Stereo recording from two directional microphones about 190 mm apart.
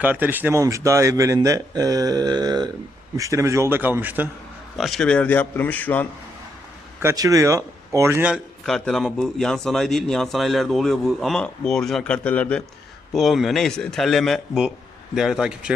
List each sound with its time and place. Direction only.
0.0 s speech: 10° right (ahead or behind)
4.8 s a man's voice: centre (ahead or behind)
7.0 s a man's voice: 15° right (ahead or behind)